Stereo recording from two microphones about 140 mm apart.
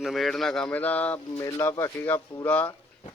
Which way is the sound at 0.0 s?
Centre (ahead or behind).